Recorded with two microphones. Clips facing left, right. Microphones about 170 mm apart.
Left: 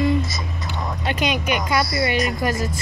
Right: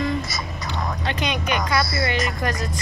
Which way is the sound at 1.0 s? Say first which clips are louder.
Left 6 dB; 10° left (ahead or behind).